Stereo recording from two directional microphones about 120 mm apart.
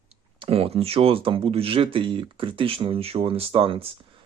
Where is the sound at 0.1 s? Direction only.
50° right (ahead or behind).